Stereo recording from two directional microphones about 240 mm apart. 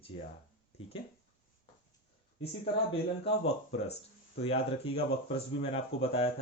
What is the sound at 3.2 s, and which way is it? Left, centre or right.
Speech, left.